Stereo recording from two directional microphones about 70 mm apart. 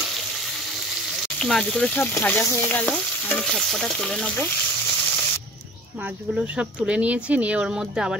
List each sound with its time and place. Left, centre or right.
1.4 s speech: centre
2.0 s speech: left
2.4 s stir: left
2.9 s stir: centre
6.9 s speech: centre